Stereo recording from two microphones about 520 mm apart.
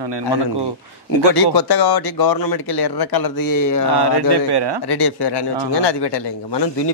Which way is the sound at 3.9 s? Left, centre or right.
Right.